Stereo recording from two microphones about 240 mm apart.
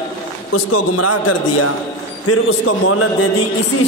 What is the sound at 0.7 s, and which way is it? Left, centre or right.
Speech, left.